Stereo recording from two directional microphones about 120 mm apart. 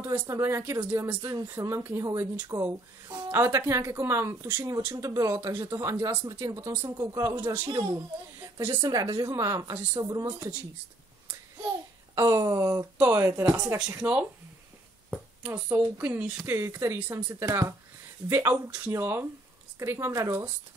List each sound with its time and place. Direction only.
0.1 s speech: 20° right (ahead or behind)
3.3 s a woman's voice: 20° right (ahead or behind)
8.8 s speech: 35° right (ahead or behind)
12.2 s speech: 25° right (ahead or behind)
13.7 s speech: 5° right (ahead or behind)
15.0 s a sound: 10° right (ahead or behind)
15.7 s speech: 15° right (ahead or behind)